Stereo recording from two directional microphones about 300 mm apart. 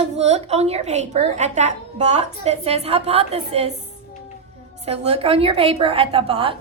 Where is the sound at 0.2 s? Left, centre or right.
Right.